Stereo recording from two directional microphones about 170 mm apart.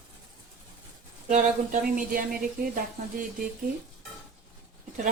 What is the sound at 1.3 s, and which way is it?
Speech, 50° right (ahead or behind).